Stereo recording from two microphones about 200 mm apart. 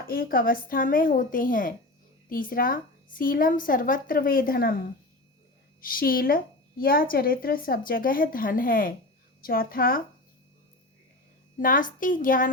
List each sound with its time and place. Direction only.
0.1 s a woman's voice: 45° left (ahead or behind)
5.8 s a woman's voice: 45° left (ahead or behind)
11.5 s a woman's voice: 40° left (ahead or behind)